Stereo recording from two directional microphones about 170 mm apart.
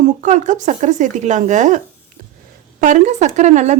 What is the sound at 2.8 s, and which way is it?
Speech, 45° right (ahead or behind).